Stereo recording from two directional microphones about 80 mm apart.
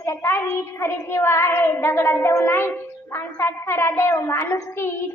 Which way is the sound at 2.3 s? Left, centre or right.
Left.